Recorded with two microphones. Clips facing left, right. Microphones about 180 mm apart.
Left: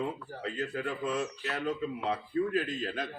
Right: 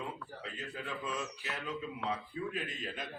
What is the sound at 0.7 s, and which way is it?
Speech, 65° left (ahead or behind).